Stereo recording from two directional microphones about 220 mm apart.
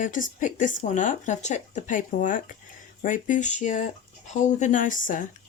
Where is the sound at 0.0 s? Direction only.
35° left (ahead or behind).